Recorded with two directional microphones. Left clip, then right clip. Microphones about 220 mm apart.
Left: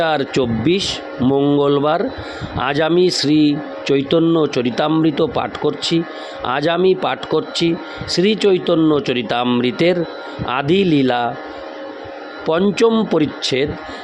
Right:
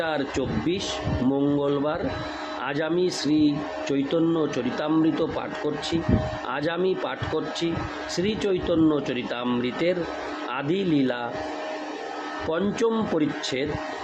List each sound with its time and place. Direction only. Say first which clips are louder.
0.0 s speech: left 10 dB; 45° left (ahead or behind)
12.5 s speech: left 10 dB; 45° left (ahead or behind)